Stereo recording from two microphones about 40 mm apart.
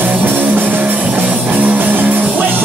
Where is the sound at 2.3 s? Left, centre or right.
Right.